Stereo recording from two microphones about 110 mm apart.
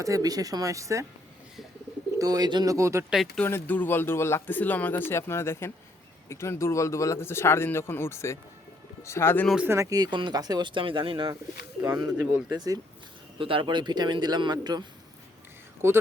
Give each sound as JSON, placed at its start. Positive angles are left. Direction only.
{"t": 0.0, "sound": "speech", "side_deg": -30}
{"t": 2.1, "sound": "speech", "side_deg": -35}
{"t": 2.7, "sound": "speech", "side_deg": -25}
{"t": 3.4, "sound": "speech", "side_deg": 15}
{"t": 9.6, "sound": "speech", "side_deg": -25}
{"t": 11.8, "sound": "speech", "side_deg": -30}
{"t": 13.4, "sound": "speech", "side_deg": -50}
{"t": 15.8, "sound": "speech", "side_deg": -25}